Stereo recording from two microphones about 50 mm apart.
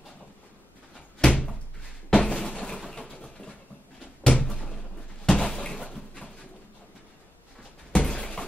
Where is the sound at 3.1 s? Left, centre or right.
Centre.